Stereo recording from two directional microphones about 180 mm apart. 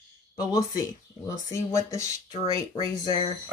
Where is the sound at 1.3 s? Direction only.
15° left (ahead or behind).